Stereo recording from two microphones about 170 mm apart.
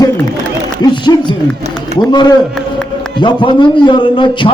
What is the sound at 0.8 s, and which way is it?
A man's voice, 25° left (ahead or behind).